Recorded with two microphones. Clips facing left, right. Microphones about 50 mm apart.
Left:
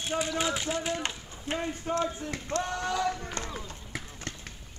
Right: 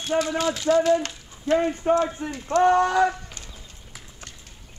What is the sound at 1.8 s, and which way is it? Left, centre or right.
Speech, right.